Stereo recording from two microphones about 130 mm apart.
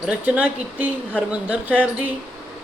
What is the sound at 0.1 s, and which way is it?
A man's voice, 10° right (ahead or behind).